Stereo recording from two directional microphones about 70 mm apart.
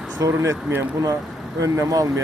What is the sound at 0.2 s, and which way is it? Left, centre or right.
Speech, right.